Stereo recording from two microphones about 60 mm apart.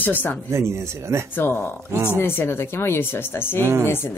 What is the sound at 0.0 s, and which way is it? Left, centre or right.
Speech, left.